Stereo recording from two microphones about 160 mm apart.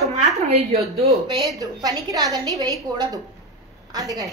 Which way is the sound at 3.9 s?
20° right (ahead or behind).